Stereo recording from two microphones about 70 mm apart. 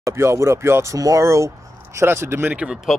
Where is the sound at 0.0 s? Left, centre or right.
Right.